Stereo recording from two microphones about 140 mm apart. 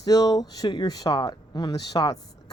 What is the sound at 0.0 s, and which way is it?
Speech, 25° left (ahead or behind).